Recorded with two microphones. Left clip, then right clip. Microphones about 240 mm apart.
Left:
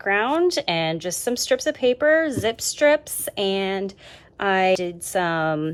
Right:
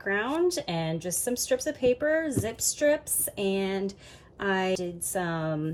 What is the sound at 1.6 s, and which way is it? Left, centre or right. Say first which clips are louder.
Speech: left 5 dB; centre.